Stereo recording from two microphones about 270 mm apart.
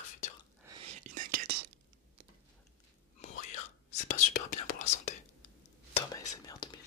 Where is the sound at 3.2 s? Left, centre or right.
Left.